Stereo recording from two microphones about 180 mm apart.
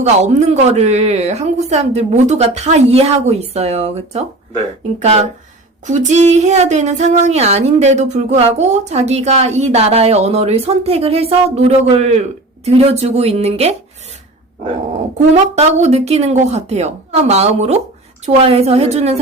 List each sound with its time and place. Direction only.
0.0 s speech: 40° right (ahead or behind)
15.5 s speech: 35° right (ahead or behind)